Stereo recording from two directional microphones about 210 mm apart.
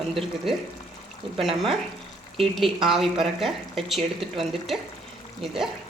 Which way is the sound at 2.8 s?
Centre (ahead or behind).